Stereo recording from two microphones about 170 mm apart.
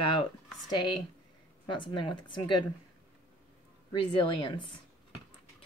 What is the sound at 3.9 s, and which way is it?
Speech, 30° left (ahead or behind).